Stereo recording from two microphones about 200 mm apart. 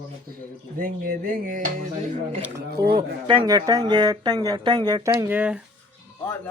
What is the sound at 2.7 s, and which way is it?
Speech, 50° right (ahead or behind).